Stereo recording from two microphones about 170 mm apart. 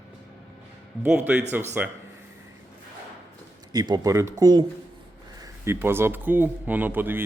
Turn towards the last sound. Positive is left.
turn(degrees=-10)  # may be behind; listen again after turning